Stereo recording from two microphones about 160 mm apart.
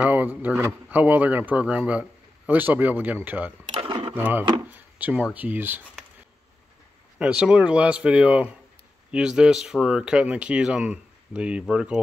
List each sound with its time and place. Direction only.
0.0 s speech: 10° right (ahead or behind)
3.8 s a sound: 30° right (ahead or behind)
4.1 s speech: 10° right (ahead or behind)
7.2 s speech: 5° right (ahead or behind)